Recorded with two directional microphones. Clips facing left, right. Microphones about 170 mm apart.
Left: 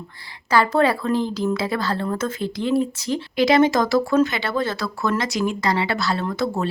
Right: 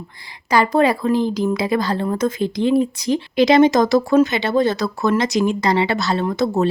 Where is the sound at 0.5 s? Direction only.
15° right (ahead or behind).